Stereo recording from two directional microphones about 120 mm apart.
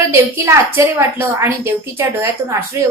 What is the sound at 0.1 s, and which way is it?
A woman's voice, 25° right (ahead or behind).